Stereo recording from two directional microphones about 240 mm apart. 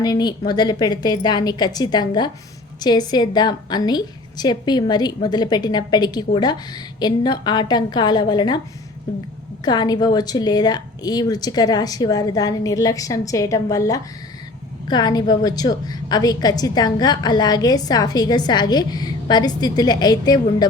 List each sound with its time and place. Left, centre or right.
0.0 s a woman's voice: centre
9.6 s a woman's voice: centre